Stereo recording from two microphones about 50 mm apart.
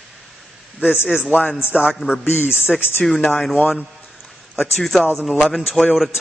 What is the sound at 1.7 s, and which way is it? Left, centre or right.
Speech, centre.